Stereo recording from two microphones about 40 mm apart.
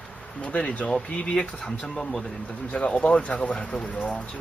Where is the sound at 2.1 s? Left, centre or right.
Centre.